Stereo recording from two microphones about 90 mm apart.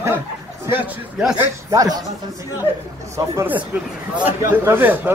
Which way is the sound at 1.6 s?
40° right (ahead or behind).